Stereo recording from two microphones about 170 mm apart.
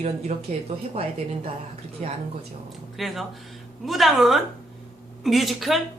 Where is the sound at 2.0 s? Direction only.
40° right (ahead or behind).